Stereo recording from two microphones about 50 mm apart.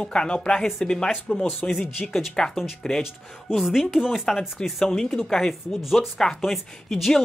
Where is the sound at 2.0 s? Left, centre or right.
Centre.